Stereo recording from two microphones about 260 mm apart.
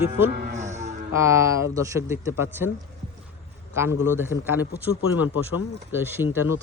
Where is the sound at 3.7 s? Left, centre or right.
Centre.